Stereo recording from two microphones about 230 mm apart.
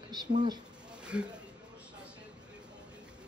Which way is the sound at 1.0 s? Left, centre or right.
Centre.